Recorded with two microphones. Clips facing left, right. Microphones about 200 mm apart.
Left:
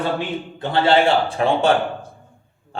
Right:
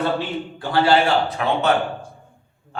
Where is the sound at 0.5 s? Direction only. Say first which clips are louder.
Left 1 dB; 25° left (ahead or behind).